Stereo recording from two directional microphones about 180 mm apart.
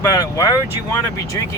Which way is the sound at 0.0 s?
15° left (ahead or behind).